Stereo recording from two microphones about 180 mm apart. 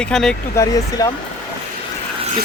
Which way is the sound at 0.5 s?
20° left (ahead or behind).